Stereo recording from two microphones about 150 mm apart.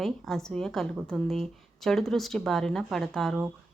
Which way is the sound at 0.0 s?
Centre (ahead or behind).